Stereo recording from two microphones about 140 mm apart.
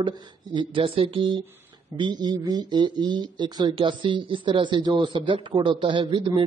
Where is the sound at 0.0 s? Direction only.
30° right (ahead or behind).